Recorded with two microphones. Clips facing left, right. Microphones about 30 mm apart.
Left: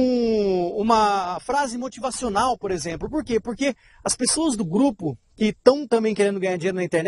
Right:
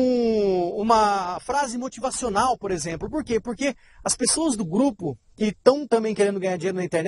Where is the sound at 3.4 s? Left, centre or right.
Left.